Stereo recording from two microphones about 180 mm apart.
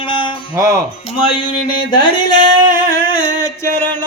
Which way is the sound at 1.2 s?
30° left (ahead or behind).